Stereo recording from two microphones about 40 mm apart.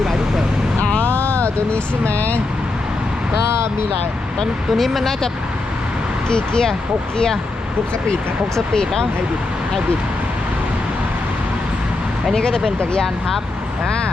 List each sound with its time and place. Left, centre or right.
0.8 s vehicle: left
1.1 s vehicle: right
1.7 s speech: left
4.8 s speech: centre
6.2 s speech: left
8.5 s speech: centre
12.4 s speech: centre